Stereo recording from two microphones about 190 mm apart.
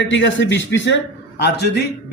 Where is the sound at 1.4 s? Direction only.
60° left (ahead or behind).